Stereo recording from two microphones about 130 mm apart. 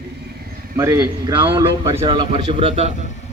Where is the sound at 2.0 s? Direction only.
35° right (ahead or behind).